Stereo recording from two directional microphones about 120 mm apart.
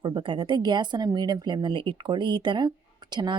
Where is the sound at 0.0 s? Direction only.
45° right (ahead or behind).